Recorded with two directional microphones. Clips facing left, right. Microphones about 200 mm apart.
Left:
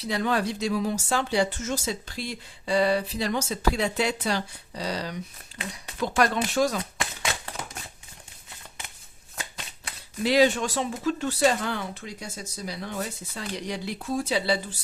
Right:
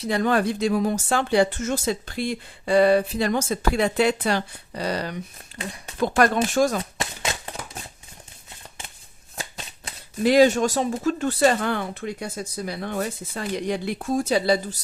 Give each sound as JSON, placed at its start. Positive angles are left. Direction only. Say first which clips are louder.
{"t": 0.0, "sound": "speech", "louder": "right 5 dB", "side_deg": -50}
{"t": 6.7, "sound": "a sound", "louder": "right 3 dB", "side_deg": -25}
{"t": 10.2, "sound": "speech", "louder": "right 5 dB", "side_deg": -45}